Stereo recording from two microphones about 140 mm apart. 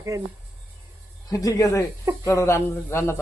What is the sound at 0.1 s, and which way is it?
Speech, 20° right (ahead or behind).